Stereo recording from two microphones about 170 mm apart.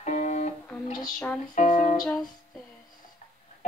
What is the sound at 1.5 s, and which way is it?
Music, 45° left (ahead or behind).